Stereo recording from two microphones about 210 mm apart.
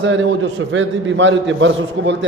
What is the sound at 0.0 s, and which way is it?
Speech, 65° right (ahead or behind).